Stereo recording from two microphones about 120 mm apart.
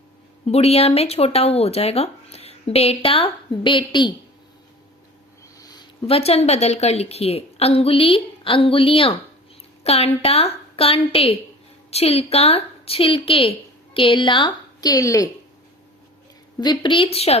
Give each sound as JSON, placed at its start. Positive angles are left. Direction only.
{"t": 0.4, "sound": "speech", "side_deg": 60}
{"t": 6.1, "sound": "a woman's voice", "side_deg": 55}
{"t": 16.6, "sound": "a woman's voice", "side_deg": 40}